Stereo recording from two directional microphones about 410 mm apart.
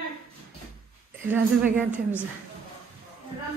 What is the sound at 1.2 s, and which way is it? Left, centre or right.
A woman's voice, centre.